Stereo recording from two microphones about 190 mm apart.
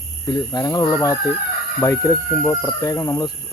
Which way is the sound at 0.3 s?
20° left (ahead or behind).